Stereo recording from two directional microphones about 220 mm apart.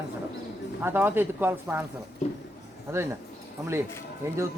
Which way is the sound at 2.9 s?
10° right (ahead or behind).